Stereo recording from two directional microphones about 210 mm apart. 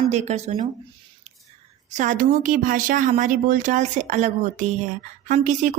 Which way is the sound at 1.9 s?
35° right (ahead or behind).